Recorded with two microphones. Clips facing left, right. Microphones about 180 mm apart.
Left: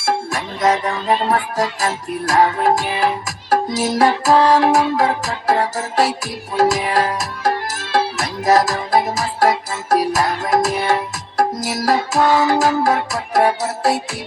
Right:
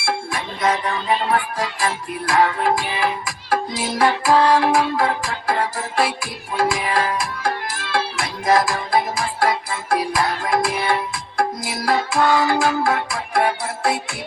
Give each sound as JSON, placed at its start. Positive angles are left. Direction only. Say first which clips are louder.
{"t": 0.0, "sound": "music", "louder": "left 4 dB", "side_deg": 40}